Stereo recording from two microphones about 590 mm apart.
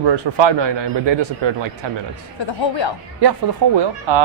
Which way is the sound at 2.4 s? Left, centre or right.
Left.